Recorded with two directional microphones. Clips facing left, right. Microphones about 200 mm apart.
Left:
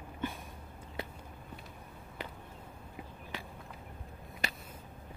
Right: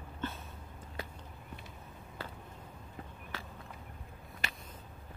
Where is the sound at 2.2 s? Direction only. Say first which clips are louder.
Left 1 dB; 15° left (ahead or behind).